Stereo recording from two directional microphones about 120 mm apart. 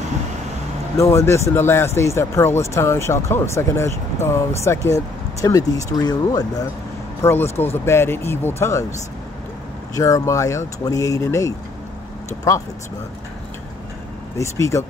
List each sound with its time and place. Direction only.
0.9 s speech: 20° left (ahead or behind)
7.2 s speech: 20° left (ahead or behind)
9.9 s speech: 25° left (ahead or behind)
14.4 s speech: 25° left (ahead or behind)